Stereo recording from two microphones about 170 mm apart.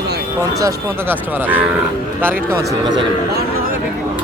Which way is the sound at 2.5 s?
20° right (ahead or behind).